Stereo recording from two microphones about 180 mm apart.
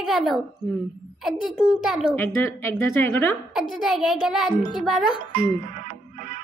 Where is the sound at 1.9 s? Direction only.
Centre (ahead or behind).